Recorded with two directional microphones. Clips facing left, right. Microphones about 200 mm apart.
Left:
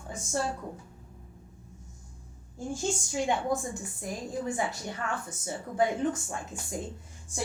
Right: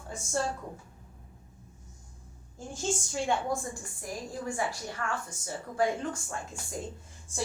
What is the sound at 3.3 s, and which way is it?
A woman's voice, 20° left (ahead or behind).